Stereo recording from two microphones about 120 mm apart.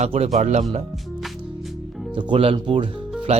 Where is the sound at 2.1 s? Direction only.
45° right (ahead or behind).